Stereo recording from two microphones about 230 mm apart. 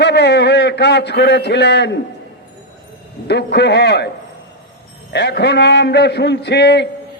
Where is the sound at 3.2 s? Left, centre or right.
Left.